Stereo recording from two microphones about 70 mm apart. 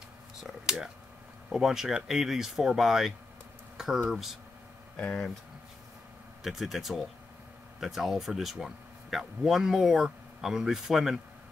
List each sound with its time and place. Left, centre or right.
0.4 s speech: centre
3.7 s a sound: centre
4.1 s speech: centre
4.9 s speech: centre
6.4 s speech: centre